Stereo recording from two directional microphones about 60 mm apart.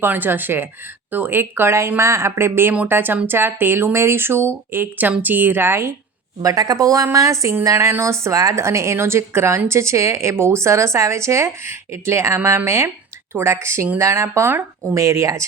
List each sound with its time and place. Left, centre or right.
0.0 s a woman's voice: right
6.4 s a woman's voice: right